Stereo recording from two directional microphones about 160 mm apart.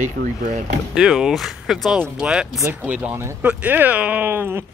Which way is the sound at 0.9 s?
5° right (ahead or behind).